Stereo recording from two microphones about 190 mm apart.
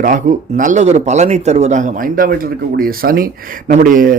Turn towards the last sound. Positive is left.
turn(degrees=-45)  # may be behind; listen again after turning